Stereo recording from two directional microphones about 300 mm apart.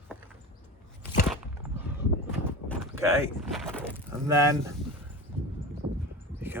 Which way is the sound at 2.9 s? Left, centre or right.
Centre.